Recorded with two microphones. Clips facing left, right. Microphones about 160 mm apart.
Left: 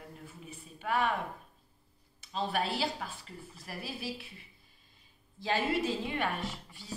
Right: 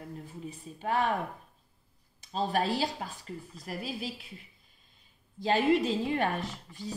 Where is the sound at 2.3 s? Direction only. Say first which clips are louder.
Right 4 dB; 40° right (ahead or behind).